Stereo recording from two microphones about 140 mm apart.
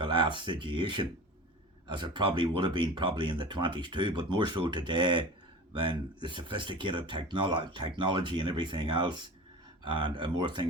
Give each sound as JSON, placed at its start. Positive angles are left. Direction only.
{"t": 0.0, "sound": "speech", "side_deg": -35}